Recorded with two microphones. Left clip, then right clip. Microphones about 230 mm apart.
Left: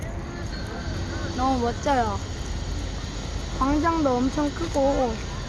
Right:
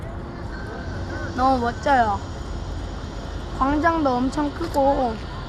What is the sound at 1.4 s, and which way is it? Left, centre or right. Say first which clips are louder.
Speech: right 5 dB; right.